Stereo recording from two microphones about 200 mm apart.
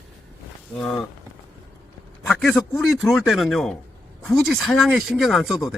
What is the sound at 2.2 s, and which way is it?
A man's voice, 5° left (ahead or behind).